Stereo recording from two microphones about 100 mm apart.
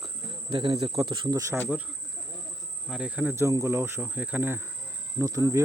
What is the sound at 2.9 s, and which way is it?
Speech, 10° right (ahead or behind).